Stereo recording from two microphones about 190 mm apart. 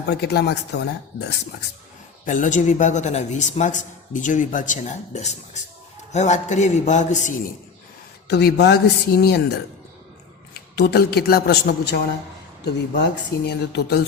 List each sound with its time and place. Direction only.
0.0 s speech: 60° left (ahead or behind)
2.2 s a man's voice: 45° left (ahead or behind)
8.3 s speech: 60° left (ahead or behind)
10.8 s speech: 55° left (ahead or behind)